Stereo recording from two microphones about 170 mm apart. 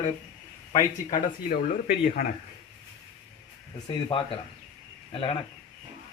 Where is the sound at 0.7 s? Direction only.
50° left (ahead or behind).